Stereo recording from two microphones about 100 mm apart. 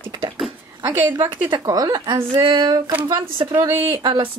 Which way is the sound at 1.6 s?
40° right (ahead or behind).